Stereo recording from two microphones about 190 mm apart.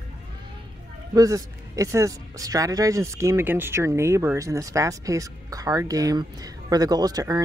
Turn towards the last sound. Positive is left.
turn(degrees=-20)  # may be behind; listen again after turning